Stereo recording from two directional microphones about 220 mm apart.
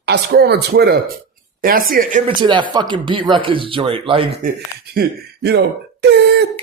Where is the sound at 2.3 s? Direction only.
20° right (ahead or behind).